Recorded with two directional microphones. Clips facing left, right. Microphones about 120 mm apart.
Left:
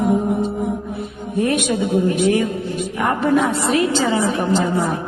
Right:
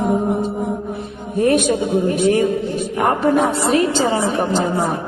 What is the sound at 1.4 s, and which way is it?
A woman's voice, 40° right (ahead or behind).